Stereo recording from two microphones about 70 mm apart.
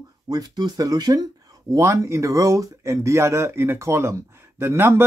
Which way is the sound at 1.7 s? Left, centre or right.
Right.